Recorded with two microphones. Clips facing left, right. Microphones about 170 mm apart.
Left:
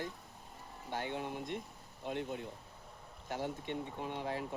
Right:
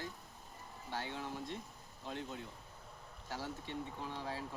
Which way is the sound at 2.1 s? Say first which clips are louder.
Left 5 dB; 60° left (ahead or behind).